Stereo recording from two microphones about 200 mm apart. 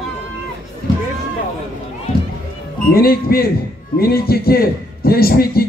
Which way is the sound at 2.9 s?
50° left (ahead or behind).